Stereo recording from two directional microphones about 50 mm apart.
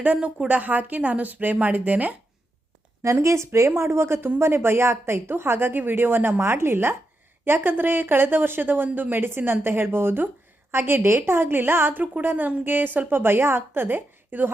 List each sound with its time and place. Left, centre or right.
0.0 s a woman's voice: right
3.0 s speech: right
3.8 s a woman's voice: right